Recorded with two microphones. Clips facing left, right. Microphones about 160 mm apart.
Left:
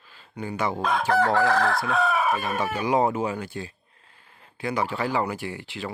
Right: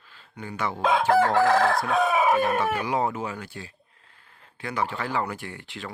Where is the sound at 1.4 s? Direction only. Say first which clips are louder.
Right 2 dB; 20° right (ahead or behind).